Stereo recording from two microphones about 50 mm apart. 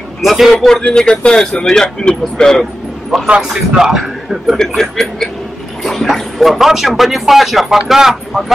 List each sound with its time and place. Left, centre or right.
0.2 s speech: centre
0.9 s speech: centre
3.3 s a man's voice: centre
4.6 s speech: centre